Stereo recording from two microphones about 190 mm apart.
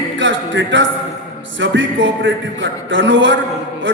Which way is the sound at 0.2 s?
75° right (ahead or behind).